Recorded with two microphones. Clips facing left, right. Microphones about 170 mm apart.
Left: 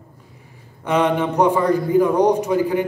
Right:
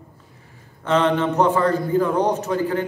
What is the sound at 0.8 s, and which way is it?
A man's voice, 10° left (ahead or behind).